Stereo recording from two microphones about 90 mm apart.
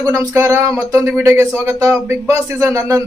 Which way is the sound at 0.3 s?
30° right (ahead or behind).